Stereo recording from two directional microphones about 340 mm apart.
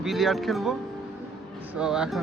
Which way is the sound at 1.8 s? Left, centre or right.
Centre.